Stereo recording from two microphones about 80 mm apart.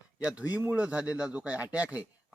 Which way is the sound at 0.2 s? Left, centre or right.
Centre.